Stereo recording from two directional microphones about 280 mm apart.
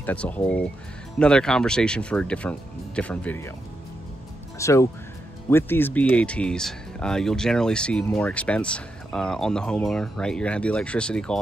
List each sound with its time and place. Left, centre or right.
0.0 s speech: centre
4.6 s speech: centre